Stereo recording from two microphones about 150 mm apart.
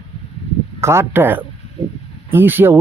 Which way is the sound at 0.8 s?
15° right (ahead or behind).